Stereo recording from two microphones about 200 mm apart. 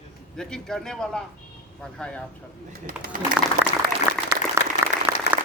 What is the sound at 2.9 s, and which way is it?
Speech, 45° right (ahead or behind).